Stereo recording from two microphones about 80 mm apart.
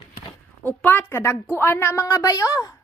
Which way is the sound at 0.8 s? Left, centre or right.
Left.